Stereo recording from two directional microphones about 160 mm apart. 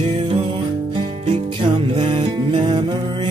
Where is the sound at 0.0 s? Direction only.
30° right (ahead or behind).